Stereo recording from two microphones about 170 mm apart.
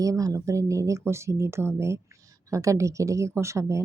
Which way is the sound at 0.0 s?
20° right (ahead or behind).